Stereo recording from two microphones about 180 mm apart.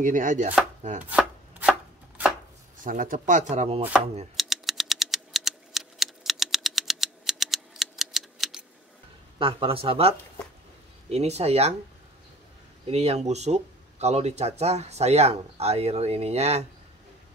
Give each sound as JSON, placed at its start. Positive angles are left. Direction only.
{"t": 0.0, "sound": "speech", "side_deg": -45}
{"t": 1.0, "sound": "chopping", "side_deg": -5}
{"t": 2.8, "sound": "speech", "side_deg": -50}
{"t": 4.4, "sound": "typewriter", "side_deg": 0}
{"t": 9.4, "sound": "speech", "side_deg": -30}
{"t": 12.8, "sound": "speech", "side_deg": -35}